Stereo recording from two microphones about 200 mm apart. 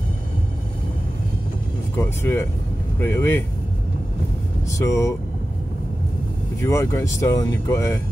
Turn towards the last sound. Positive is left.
turn(degrees=15)  # may be behind; listen again after turning